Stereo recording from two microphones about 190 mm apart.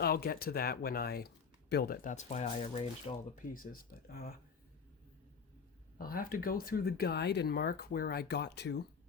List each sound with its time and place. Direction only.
0.0 s speech: 50° left (ahead or behind)
2.1 s speech: 35° left (ahead or behind)
6.0 s speech: 50° left (ahead or behind)